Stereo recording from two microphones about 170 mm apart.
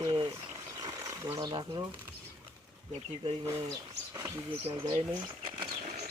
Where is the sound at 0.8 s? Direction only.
20° right (ahead or behind).